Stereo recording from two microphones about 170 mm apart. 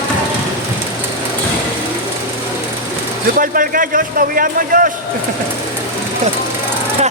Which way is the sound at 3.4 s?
55° right (ahead or behind).